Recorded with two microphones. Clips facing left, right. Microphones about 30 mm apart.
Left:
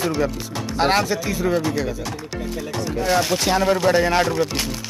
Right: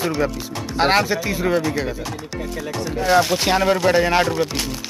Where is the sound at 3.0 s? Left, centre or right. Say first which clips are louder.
Right 3 dB; centre.